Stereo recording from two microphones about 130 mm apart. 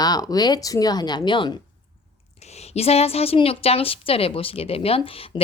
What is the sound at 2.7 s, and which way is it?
A woman's voice, 50° left (ahead or behind).